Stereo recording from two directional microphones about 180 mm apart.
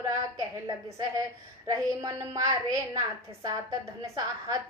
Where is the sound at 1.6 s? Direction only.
15° right (ahead or behind).